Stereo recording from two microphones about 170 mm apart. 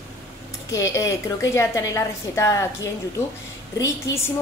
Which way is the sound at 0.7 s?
20° left (ahead or behind).